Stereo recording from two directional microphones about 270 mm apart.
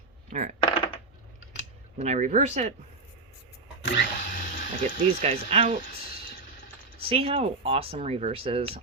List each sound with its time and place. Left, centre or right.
0.3 s coin: right
2.0 s speech: right
3.8 s drill: left
4.4 s a sound: left
5.0 s speech: right
7.0 s speech: right